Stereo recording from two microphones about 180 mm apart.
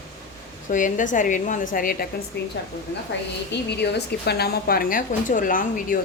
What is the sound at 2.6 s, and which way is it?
Speech, 70° left (ahead or behind).